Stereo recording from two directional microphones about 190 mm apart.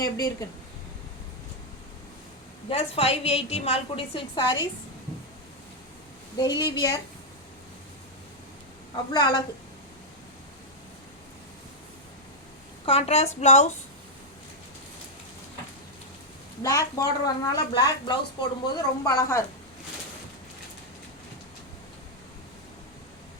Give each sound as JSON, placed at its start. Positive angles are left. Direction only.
{"t": 0.0, "sound": "a woman's voice", "side_deg": 20}
{"t": 2.6, "sound": "a woman's voice", "side_deg": 30}
{"t": 6.3, "sound": "a woman's voice", "side_deg": 20}
{"t": 9.1, "sound": "a woman's voice", "side_deg": 20}
{"t": 12.8, "sound": "a woman's voice", "side_deg": 30}
{"t": 16.6, "sound": "a woman's voice", "side_deg": 20}